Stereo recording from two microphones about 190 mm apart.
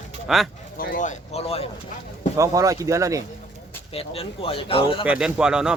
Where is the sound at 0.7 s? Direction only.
50° left (ahead or behind); by 1.7 s 30° left (ahead or behind).